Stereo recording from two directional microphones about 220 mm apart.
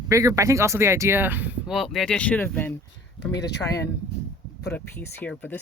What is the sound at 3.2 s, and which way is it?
Speech, 50° left (ahead or behind).